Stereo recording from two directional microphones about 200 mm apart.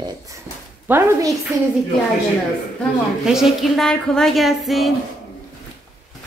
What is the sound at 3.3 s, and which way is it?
A woman's voice, centre (ahead or behind).